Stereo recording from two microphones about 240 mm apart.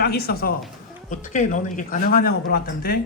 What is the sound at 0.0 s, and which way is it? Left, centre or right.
A man's voice, left.